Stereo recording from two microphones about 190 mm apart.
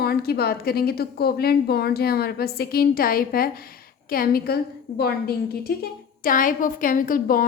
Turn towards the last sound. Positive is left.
turn(degrees=45)  # may be behind; listen again after turning